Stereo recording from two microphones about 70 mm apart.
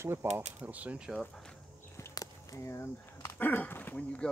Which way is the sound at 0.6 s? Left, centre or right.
Right.